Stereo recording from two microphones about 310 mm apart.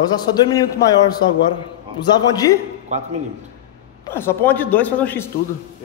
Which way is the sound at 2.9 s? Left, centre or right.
Right.